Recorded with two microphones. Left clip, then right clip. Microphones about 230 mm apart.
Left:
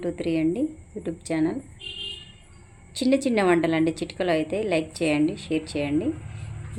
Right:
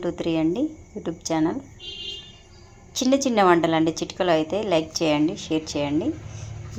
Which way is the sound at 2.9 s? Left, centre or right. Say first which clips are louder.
Right 2 dB; centre.